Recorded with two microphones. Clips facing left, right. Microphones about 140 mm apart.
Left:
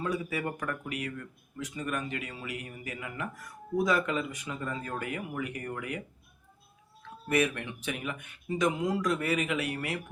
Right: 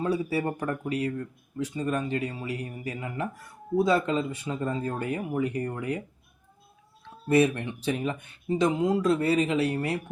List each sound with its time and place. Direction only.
0.0 s speech: 30° right (ahead or behind)
7.3 s speech: 30° right (ahead or behind)